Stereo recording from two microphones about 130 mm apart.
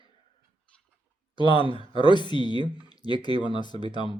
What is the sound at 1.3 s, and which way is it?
Speech, 35° left (ahead or behind).